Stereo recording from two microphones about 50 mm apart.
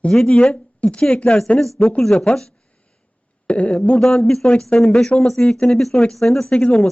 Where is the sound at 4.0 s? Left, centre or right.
Centre.